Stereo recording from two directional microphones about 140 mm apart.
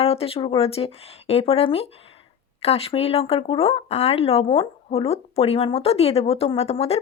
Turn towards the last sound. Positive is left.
turn(degrees=45)  # may be behind; listen again after turning